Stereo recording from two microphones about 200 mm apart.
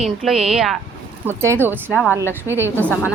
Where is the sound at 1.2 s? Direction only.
10° right (ahead or behind).